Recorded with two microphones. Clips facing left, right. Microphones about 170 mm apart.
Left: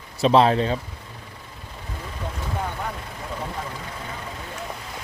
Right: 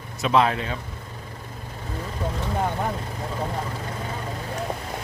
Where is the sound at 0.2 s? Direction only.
30° left (ahead or behind).